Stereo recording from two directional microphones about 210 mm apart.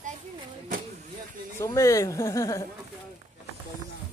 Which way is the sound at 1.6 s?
15° left (ahead or behind).